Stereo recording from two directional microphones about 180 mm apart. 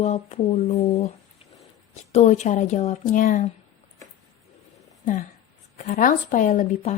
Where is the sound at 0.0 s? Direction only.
40° left (ahead or behind).